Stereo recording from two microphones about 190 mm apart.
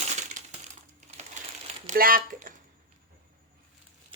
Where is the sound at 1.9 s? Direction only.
50° right (ahead or behind).